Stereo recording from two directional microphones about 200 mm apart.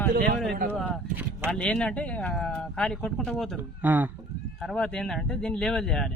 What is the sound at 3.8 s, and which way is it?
Speech, 10° right (ahead or behind).